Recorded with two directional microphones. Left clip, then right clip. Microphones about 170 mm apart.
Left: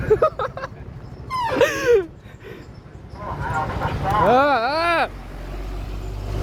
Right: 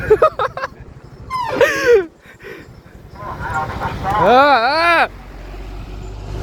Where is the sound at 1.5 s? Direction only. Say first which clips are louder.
Right 5 dB; 25° right (ahead or behind).